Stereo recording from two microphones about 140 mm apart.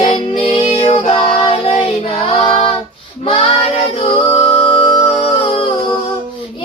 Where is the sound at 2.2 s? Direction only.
45° left (ahead or behind).